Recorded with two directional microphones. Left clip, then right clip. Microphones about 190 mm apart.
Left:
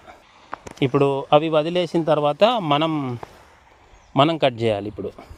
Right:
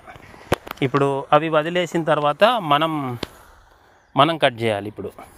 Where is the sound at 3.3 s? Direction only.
20° right (ahead or behind).